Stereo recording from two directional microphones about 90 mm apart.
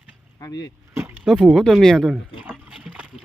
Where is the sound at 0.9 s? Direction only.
30° right (ahead or behind).